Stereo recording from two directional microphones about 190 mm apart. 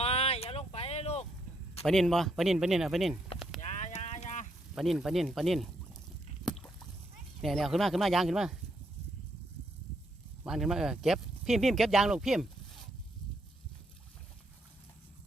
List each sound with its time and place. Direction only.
0.0 s a sound: 30° left (ahead or behind)
1.8 s speech: centre (ahead or behind)
3.3 s a sound: centre (ahead or behind)
3.6 s boat: 40° left (ahead or behind)
4.7 s speech: centre (ahead or behind)
6.4 s boat: centre (ahead or behind)
7.4 s speech: centre (ahead or behind)
10.4 s speech: centre (ahead or behind)